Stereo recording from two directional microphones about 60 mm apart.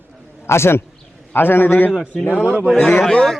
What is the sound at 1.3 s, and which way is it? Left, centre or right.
Speech, left.